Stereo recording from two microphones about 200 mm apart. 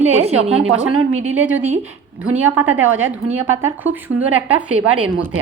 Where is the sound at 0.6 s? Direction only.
90° right.